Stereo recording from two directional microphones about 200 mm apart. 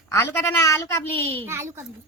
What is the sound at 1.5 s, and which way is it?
Speech, 15° right (ahead or behind).